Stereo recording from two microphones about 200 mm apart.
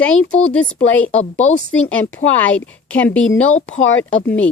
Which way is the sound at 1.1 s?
75° left (ahead or behind).